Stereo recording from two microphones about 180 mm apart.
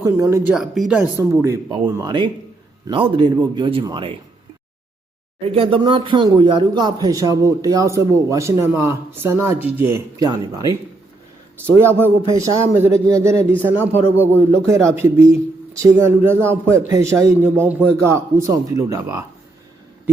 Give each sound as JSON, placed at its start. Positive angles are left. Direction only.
{"t": 0.0, "sound": "a man's voice", "side_deg": -15}
{"t": 0.5, "sound": "speech", "side_deg": -5}
{"t": 1.1, "sound": "a man's voice", "side_deg": -15}
{"t": 1.7, "sound": "speech", "side_deg": -25}
{"t": 5.4, "sound": "a man's voice", "side_deg": -30}